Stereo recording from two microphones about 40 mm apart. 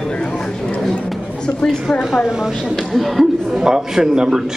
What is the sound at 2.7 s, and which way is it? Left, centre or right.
A man's voice, centre.